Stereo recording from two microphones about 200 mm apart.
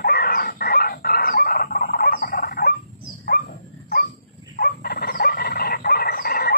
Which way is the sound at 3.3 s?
50° left (ahead or behind).